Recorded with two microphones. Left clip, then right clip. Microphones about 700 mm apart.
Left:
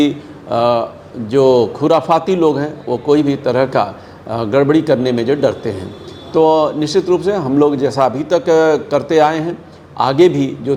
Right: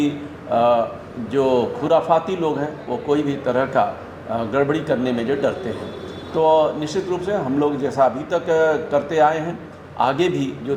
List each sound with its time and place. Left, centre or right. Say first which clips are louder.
0.5 s a man's voice: left 3 dB; left